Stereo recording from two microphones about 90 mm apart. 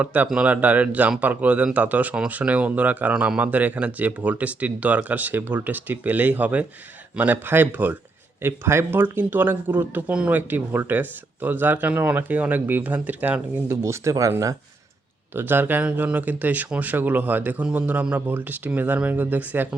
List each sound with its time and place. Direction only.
0.0 s speech: 15° right (ahead or behind)
13.7 s speech: 30° right (ahead or behind)
15.3 s speech: 25° right (ahead or behind)